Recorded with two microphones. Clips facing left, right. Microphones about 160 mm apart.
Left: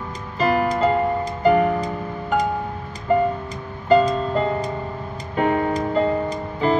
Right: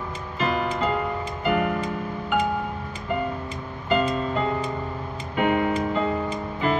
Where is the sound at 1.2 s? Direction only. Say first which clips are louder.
Left 7 dB; 35° left (ahead or behind).